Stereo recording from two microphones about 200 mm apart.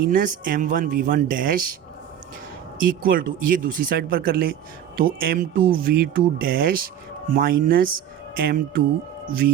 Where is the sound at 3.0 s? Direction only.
45° right (ahead or behind).